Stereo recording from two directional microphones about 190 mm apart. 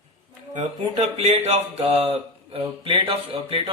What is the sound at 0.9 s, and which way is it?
Speech, 35° right (ahead or behind).